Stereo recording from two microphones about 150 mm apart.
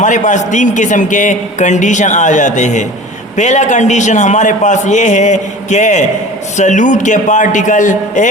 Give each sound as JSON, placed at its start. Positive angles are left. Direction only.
{"t": 0.0, "sound": "a man's voice", "side_deg": 55}